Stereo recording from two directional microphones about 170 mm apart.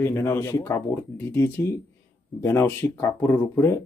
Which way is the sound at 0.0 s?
15° left (ahead or behind).